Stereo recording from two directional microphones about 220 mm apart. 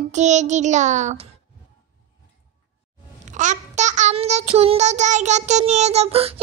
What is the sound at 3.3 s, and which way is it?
A child's voice, 35° right (ahead or behind).